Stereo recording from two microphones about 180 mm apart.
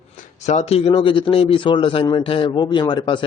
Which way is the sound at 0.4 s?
35° left (ahead or behind).